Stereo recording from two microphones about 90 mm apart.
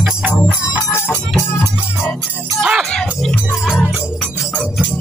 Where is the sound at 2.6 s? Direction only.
Centre (ahead or behind).